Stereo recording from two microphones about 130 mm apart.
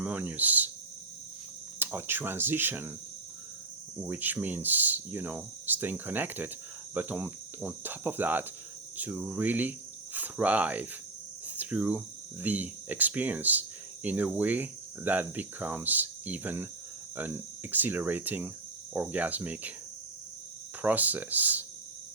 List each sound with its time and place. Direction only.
0.0 s speech: 10° right (ahead or behind)
1.8 s speech: 15° right (ahead or behind)
4.0 s speech: 15° right (ahead or behind)
20.8 s speech: 15° right (ahead or behind)